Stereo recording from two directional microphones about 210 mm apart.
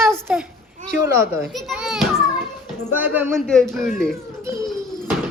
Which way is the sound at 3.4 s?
Centre (ahead or behind).